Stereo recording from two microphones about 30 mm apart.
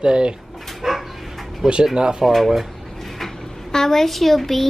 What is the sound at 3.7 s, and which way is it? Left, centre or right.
Speech, centre.